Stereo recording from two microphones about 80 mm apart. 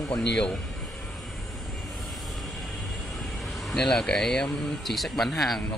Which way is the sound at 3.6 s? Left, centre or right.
Centre.